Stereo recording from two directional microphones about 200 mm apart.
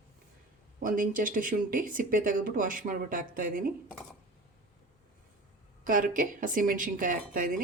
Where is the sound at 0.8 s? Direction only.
45° right (ahead or behind).